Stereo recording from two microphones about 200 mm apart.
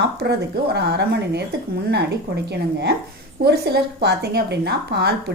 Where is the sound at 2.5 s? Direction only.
55° right (ahead or behind).